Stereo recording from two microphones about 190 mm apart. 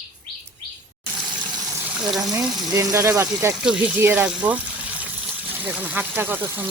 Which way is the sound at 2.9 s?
15° right (ahead or behind).